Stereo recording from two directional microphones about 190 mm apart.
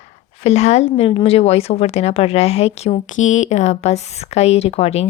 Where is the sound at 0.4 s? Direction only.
35° left (ahead or behind).